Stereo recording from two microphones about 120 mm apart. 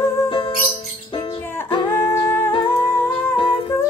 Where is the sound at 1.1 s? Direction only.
40° left (ahead or behind).